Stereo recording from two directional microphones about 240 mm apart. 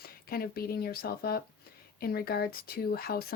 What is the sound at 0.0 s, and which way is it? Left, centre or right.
Speech, left.